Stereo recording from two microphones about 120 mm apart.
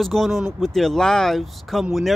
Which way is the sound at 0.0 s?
Centre (ahead or behind).